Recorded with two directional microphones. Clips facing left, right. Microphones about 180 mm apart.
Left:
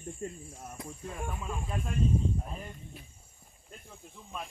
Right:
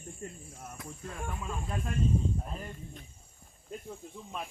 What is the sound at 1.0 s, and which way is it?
Speech, 15° left (ahead or behind).